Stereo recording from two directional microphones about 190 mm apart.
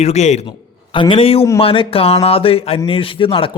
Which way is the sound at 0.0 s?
35° left (ahead or behind).